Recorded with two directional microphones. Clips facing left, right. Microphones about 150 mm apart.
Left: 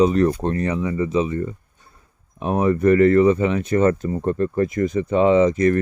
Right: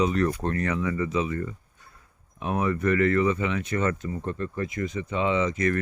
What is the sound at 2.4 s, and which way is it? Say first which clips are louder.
Speech: left 7 dB; 35° left (ahead or behind).